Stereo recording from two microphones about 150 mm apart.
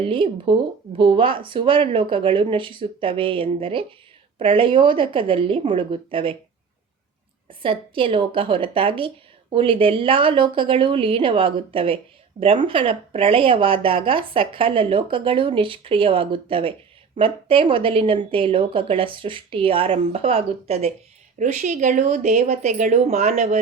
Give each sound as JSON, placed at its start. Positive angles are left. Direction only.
{"t": 0.0, "sound": "speech", "side_deg": -35}
{"t": 7.6, "sound": "speech", "side_deg": -35}
{"t": 21.3, "sound": "speech", "side_deg": -55}